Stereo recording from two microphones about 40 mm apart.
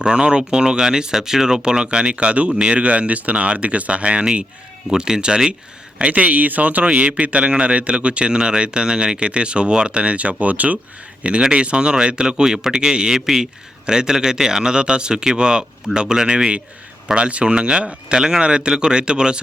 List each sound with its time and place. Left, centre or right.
0.0 s speech: right
6.0 s a man's voice: right
11.2 s a man's voice: right